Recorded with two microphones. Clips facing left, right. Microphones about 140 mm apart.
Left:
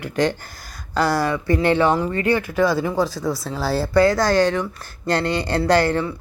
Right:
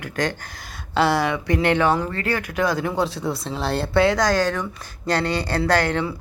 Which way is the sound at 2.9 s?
25° right (ahead or behind).